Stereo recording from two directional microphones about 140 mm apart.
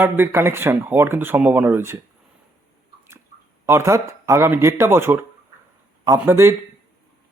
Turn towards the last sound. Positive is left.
turn(degrees=-20)  # may be behind; listen again after turning